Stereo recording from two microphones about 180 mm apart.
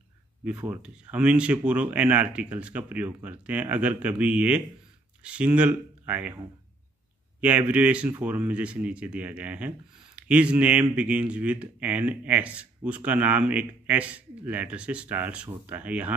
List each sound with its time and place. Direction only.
0.5 s speech: 10° right (ahead or behind)